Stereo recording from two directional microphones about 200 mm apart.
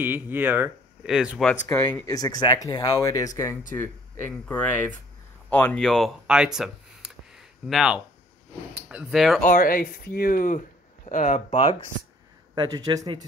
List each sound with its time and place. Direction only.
0.0 s speech: 10° right (ahead or behind)
1.5 s speech: 10° left (ahead or behind)
3.7 s speech: 10° left (ahead or behind)
9.4 s speech: 45° left (ahead or behind)
12.5 s speech: 20° right (ahead or behind)